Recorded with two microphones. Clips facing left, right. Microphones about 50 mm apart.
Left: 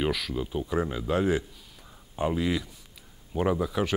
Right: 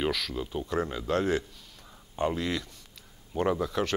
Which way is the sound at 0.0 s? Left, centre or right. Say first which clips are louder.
Left 2 dB; centre.